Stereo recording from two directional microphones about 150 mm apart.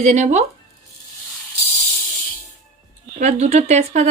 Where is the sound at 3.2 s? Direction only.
50° right (ahead or behind).